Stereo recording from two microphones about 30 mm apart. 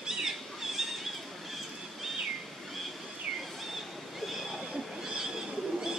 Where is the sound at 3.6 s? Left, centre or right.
Centre.